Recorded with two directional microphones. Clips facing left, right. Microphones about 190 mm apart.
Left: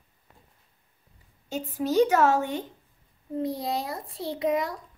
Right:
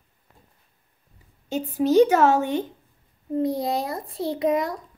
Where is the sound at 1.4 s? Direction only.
25° right (ahead or behind).